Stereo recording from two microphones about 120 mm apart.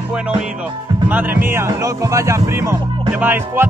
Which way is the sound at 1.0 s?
15° right (ahead or behind).